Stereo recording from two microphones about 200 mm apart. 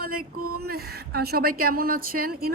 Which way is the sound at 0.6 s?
50° right (ahead or behind).